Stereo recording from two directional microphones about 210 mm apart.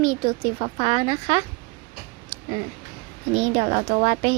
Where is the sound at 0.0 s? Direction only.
25° right (ahead or behind).